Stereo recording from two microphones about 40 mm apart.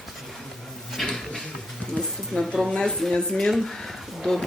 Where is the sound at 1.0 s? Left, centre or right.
Centre.